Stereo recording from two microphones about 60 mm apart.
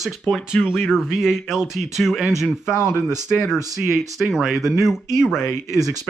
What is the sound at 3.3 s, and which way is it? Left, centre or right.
Speech, left.